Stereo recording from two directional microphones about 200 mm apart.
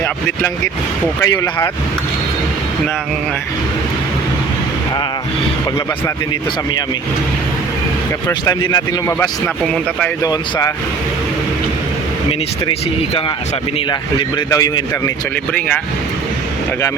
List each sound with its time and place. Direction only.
1.2 s speech: 15° left (ahead or behind)
8.3 s speech: 20° left (ahead or behind)
14.2 s speech: 20° left (ahead or behind)